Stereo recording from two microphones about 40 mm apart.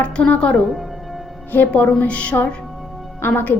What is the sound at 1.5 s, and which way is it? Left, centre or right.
Speech, left.